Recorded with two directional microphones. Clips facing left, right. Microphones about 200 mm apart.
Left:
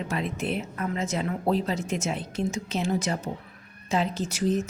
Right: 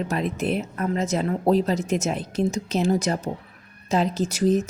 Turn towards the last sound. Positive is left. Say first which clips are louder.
# right 5 dB
turn(degrees=-40)  # may be behind; listen again after turning